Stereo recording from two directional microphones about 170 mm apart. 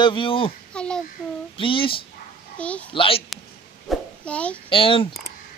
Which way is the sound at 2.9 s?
30° left (ahead or behind).